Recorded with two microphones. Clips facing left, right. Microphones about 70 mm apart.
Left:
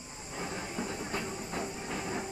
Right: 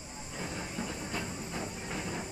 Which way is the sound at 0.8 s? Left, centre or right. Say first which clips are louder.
Left 2 dB; centre.